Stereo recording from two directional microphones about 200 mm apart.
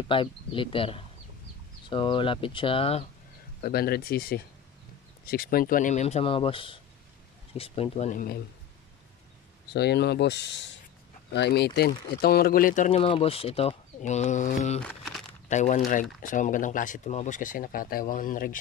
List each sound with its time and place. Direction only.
0.1 s speech: 25° left (ahead or behind)
3.6 s speech: 50° left (ahead or behind)
9.7 s speech: 55° left (ahead or behind); by 14.8 s 35° left (ahead or behind)
14.8 s speech: centre (ahead or behind)
15.5 s speech: 35° left (ahead or behind)